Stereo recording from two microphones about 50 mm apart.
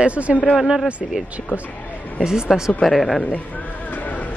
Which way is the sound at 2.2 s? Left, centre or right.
Centre.